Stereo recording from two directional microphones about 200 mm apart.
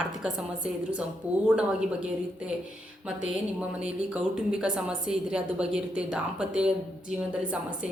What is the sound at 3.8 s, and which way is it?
A woman's voice, 5° right (ahead or behind).